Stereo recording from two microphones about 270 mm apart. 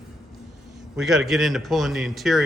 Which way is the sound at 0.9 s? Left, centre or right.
Centre.